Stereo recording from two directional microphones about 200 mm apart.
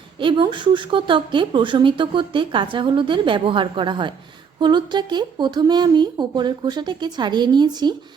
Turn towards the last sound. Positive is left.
turn(degrees=-20)  # may be behind; listen again after turning